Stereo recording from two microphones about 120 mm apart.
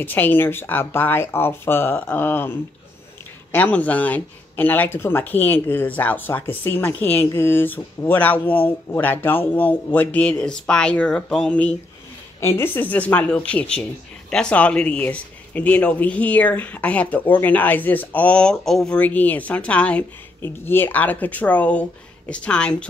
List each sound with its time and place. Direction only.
0.0 s speech: 15° left (ahead or behind)
3.5 s speech: 15° left (ahead or behind)
12.4 s speech: 20° left (ahead or behind)